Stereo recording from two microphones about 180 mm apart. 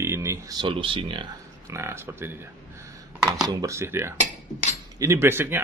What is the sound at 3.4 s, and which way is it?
Speech, 15° right (ahead or behind).